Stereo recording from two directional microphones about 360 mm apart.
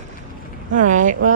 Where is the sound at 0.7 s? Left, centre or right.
Right.